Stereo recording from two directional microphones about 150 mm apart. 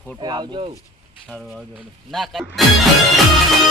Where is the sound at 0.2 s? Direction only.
30° right (ahead or behind).